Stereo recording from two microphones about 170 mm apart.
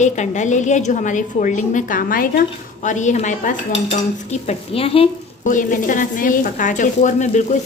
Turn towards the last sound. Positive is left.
turn(degrees=45)  # may be behind; listen again after turning